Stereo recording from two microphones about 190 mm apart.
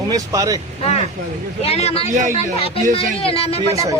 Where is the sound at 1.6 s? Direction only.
35° left (ahead or behind).